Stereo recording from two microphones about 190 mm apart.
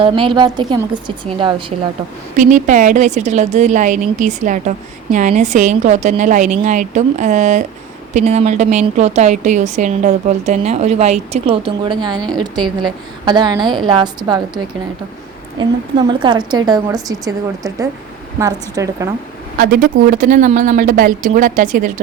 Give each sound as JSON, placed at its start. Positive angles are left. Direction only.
{"t": 0.0, "sound": "a woman's voice", "side_deg": -25}
{"t": 2.3, "sound": "a woman's voice", "side_deg": -40}
{"t": 19.5, "sound": "a woman's voice", "side_deg": -50}